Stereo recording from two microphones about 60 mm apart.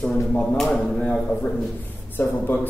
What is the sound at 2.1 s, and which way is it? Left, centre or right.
Speech, left.